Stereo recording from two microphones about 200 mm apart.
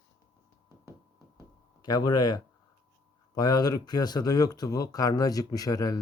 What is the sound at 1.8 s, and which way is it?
Speech, 20° left (ahead or behind).